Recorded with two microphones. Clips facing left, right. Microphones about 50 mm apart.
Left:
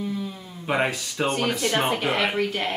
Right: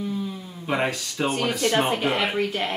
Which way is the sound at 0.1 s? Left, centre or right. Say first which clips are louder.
Right 1 dB; centre.